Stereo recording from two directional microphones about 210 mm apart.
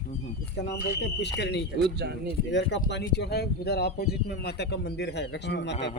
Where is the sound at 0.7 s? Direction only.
55° left (ahead or behind).